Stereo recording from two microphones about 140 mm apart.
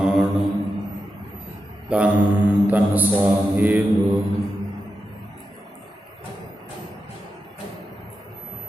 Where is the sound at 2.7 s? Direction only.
10° right (ahead or behind).